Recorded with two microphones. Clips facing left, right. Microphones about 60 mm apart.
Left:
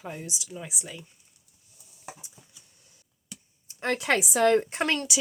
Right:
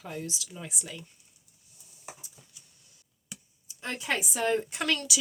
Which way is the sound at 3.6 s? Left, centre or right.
Left.